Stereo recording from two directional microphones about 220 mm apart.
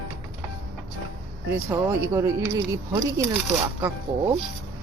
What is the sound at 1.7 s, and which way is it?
A woman's voice, 10° right (ahead or behind).